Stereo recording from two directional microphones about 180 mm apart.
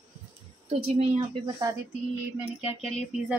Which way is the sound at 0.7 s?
35° right (ahead or behind).